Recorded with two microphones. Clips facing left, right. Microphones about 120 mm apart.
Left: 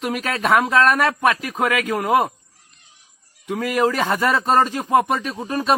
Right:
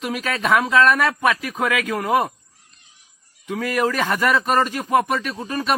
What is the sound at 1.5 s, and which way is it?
Speech, 40° left (ahead or behind).